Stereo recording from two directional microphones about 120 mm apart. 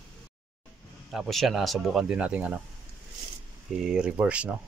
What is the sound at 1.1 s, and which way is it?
Speech, centre (ahead or behind).